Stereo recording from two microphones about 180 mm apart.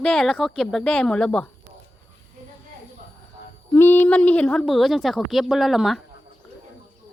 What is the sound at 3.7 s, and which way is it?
A woman's voice, 10° left (ahead or behind).